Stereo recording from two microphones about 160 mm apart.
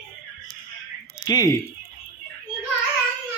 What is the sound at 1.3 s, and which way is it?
Speech, 25° left (ahead or behind).